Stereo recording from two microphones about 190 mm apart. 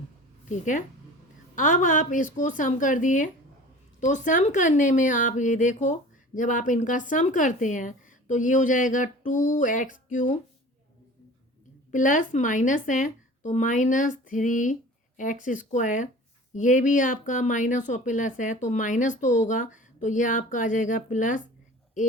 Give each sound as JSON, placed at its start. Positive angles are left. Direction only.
{"t": 0.4, "sound": "speech", "side_deg": 40}
{"t": 11.9, "sound": "speech", "side_deg": 40}